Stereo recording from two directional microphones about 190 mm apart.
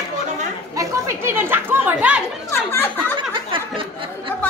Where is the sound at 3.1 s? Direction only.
25° right (ahead or behind).